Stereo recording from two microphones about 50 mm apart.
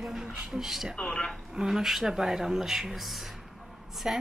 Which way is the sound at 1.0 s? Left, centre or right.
Centre.